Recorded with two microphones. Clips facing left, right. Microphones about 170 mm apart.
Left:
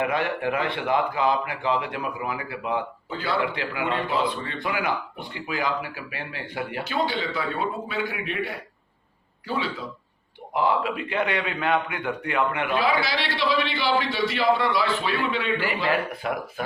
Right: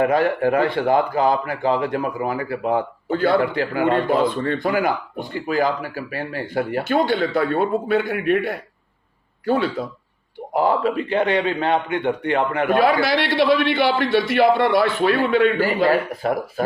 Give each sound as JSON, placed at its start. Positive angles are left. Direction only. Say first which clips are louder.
{"t": 0.0, "sound": "a man's voice", "louder": "right 7 dB", "side_deg": -40}
{"t": 12.7, "sound": "a man's voice", "louder": "right 8 dB", "side_deg": -55}